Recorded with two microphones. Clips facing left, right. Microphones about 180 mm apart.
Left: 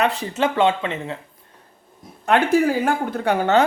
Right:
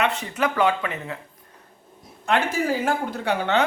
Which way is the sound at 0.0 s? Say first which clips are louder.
Left 3 dB; 35° left (ahead or behind).